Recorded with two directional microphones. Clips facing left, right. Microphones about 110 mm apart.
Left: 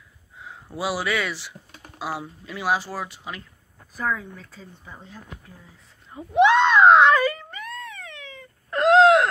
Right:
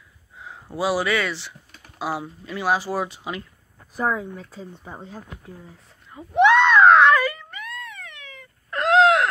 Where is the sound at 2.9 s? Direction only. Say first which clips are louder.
Right 6 dB; 20° right (ahead or behind).